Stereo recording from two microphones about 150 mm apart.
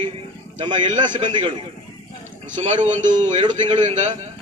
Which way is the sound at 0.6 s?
30° right (ahead or behind).